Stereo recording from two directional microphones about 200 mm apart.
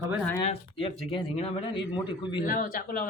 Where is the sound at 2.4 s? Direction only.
45° left (ahead or behind).